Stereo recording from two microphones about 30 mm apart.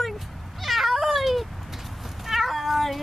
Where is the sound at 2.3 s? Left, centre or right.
Centre.